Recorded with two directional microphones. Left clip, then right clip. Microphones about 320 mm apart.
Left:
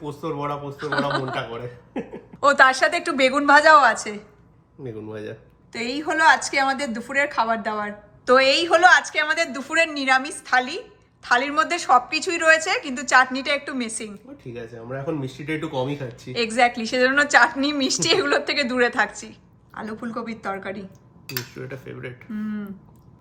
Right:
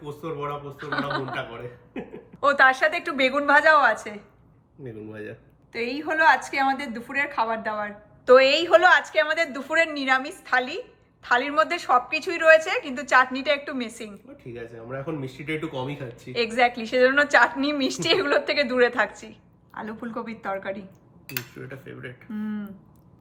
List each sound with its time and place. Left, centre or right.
0.0 s speech: centre
0.8 s a woman's voice: centre
2.4 s a woman's voice: centre
21.5 s cutlery: centre
22.3 s a woman's voice: centre